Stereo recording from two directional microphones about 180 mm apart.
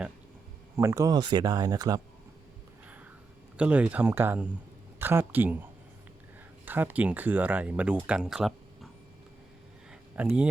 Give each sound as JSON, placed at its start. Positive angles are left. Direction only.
{"t": 0.8, "sound": "speech", "side_deg": -15}
{"t": 3.6, "sound": "speech", "side_deg": -5}
{"t": 6.7, "sound": "speech", "side_deg": -10}
{"t": 10.2, "sound": "speech", "side_deg": -5}